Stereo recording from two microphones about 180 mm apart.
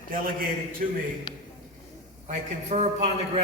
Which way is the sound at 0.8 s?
45° right (ahead or behind).